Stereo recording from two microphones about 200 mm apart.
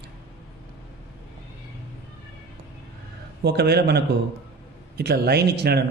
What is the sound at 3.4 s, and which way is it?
A man's voice, 55° right (ahead or behind).